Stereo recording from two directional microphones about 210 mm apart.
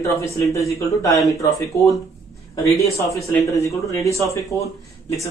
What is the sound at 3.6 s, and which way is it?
Speech, 15° left (ahead or behind).